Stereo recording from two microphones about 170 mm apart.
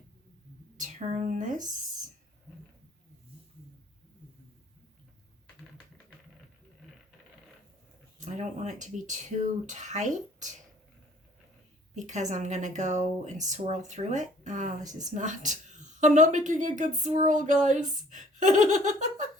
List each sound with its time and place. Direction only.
0.8 s a woman's voice: 45° right (ahead or behind)
8.2 s a woman's voice: 45° right (ahead or behind)
11.9 s a woman's voice: 45° right (ahead or behind)